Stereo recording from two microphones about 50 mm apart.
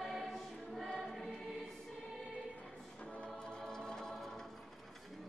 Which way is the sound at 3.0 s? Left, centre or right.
Left.